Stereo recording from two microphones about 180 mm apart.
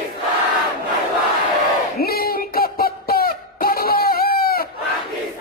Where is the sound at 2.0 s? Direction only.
55° left (ahead or behind).